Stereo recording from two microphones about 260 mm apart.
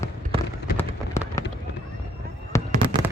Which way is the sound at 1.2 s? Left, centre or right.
Centre.